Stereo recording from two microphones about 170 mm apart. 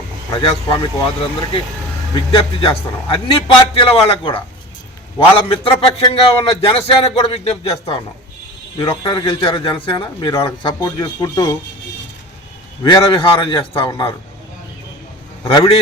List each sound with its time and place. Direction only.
0.3 s speech: 30° left (ahead or behind)
5.5 s speech: 30° left (ahead or behind)
12.8 s speech: 25° left (ahead or behind)
15.4 s speech: 30° left (ahead or behind)